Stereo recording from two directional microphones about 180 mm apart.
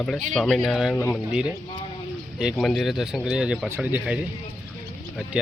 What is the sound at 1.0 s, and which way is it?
Speech, 10° left (ahead or behind).